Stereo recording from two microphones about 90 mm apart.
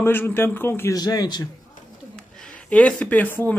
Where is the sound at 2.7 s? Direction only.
15° left (ahead or behind).